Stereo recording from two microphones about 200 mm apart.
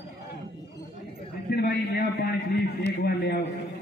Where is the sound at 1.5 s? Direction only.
50° left (ahead or behind).